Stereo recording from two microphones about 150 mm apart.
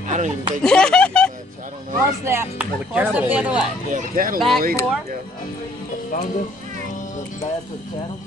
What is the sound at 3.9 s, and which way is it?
Speech, 65° right (ahead or behind).